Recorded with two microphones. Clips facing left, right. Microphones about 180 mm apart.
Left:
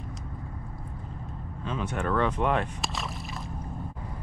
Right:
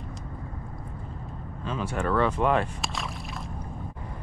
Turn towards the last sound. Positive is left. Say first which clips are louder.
# right 2 dB
turn(degrees=0)  # may be behind; listen again after turning